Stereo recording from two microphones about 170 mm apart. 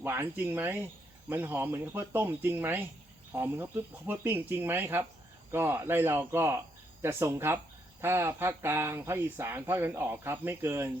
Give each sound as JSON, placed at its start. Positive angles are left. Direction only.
{"t": 0.0, "sound": "speech", "side_deg": -15}